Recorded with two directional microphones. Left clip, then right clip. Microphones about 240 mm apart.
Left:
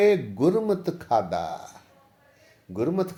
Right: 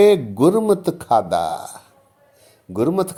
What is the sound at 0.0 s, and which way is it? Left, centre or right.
Speech, right.